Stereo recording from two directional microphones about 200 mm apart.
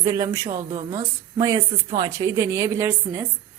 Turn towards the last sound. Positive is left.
turn(degrees=-15)  # may be behind; listen again after turning